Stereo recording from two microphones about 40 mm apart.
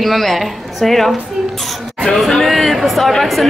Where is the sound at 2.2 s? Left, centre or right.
Centre.